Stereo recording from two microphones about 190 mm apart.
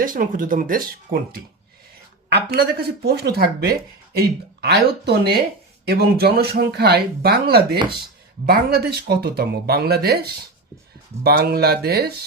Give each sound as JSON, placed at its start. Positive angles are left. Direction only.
{"t": 0.0, "sound": "speech", "side_deg": -45}
{"t": 11.2, "sound": "speech", "side_deg": -55}